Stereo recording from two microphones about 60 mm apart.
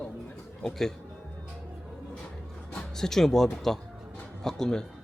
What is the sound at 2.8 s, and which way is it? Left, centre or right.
Speech, centre.